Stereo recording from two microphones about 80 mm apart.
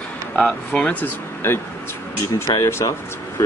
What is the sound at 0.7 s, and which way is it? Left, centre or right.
Speech, centre.